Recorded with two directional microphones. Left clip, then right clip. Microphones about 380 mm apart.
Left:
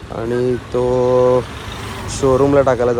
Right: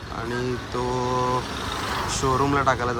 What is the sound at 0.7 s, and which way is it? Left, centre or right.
Speech, centre.